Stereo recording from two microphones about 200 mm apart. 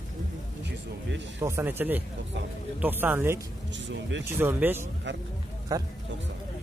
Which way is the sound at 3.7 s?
65° right (ahead or behind).